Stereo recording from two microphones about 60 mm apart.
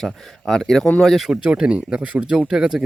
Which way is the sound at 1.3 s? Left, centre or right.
Centre.